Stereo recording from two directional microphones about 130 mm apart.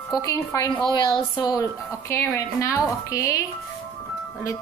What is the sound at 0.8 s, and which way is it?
A woman's voice, 35° left (ahead or behind).